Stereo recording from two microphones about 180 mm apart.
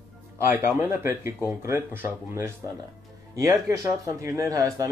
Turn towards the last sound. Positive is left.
turn(degrees=-20)  # may be behind; listen again after turning